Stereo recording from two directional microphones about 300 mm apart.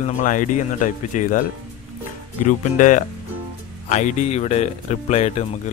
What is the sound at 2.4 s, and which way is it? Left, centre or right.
Speech, left.